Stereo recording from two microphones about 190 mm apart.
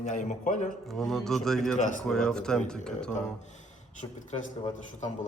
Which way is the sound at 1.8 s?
40° left (ahead or behind).